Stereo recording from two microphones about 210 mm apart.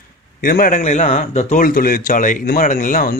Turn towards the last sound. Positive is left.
turn(degrees=40)  # may be behind; listen again after turning